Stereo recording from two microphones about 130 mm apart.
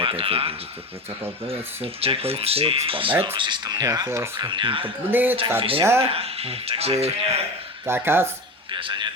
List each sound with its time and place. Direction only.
0.0 s speech: 45° right (ahead or behind)
1.8 s speech: 45° right (ahead or behind); by 4.3 s 20° right (ahead or behind)
4.4 s speech: 35° right (ahead or behind)
5.1 s speech: 15° right (ahead or behind)
5.5 s speech: 45° right (ahead or behind)
7.9 s speech: 15° right (ahead or behind)
8.7 s speech: 35° right (ahead or behind)